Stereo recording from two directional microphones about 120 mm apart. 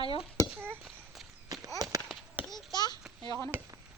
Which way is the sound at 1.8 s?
30° right (ahead or behind).